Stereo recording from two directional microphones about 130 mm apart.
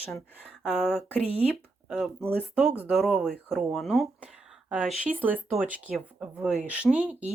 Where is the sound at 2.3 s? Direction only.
10° right (ahead or behind).